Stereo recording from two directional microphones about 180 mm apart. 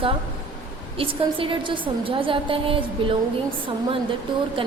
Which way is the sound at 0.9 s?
30° right (ahead or behind).